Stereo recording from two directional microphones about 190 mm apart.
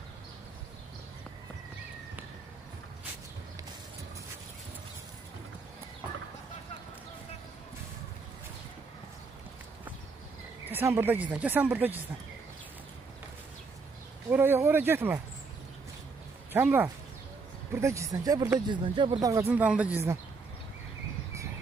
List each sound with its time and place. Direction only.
10.7 s speech: 10° right (ahead or behind)
14.3 s speech: 10° right (ahead or behind)
16.5 s speech: 10° right (ahead or behind)